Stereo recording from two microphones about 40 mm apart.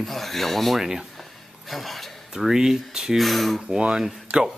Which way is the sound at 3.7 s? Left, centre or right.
Right.